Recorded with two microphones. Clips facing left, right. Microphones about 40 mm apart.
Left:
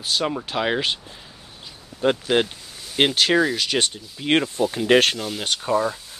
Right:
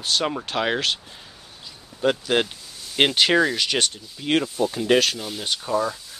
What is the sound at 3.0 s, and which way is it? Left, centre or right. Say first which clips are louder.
Speech: even; centre.